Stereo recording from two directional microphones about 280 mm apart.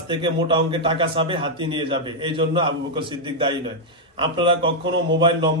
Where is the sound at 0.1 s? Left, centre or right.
Centre.